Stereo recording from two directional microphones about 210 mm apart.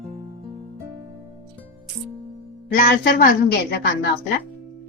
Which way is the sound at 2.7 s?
45° left (ahead or behind).